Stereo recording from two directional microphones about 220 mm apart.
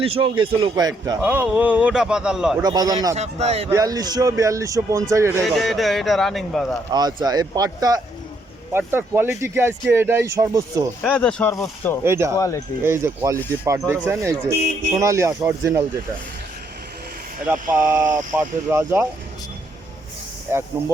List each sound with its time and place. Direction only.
0.0 s a man's voice: 25° right (ahead or behind)
1.2 s a man's voice: 5° right (ahead or behind)
2.6 s speech: 15° right (ahead or behind)
3.2 s a man's voice: 30° right (ahead or behind)
3.7 s speech: 15° right (ahead or behind)
5.4 s a man's voice: centre (ahead or behind)
6.9 s speech: 20° right (ahead or behind)
11.0 s speech: 5° left (ahead or behind)
12.0 s speech: 10° right (ahead or behind)
12.4 s speech: 15° left (ahead or behind)
12.8 s speech: 10° right (ahead or behind)
17.4 s speech: 10° right (ahead or behind)
20.5 s speech: 10° right (ahead or behind)